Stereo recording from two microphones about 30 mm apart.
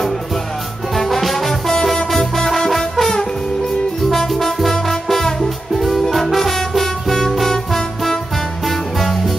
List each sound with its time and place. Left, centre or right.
0.9 s music: centre